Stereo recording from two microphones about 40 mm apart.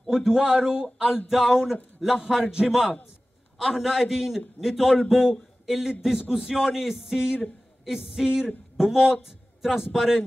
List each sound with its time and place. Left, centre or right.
0.1 s speech: centre
1.3 s a man's voice: centre
3.5 s a man's voice: centre